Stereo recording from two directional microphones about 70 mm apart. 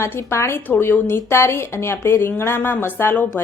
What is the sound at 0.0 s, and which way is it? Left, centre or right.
A woman's voice, left.